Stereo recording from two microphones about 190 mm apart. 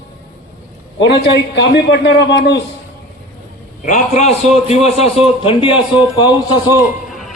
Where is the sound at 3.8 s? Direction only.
40° left (ahead or behind).